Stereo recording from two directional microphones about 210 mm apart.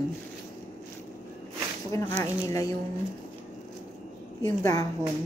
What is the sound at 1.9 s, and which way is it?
Speech, 15° left (ahead or behind).